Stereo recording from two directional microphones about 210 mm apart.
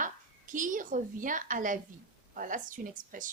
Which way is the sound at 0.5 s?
40° right (ahead or behind).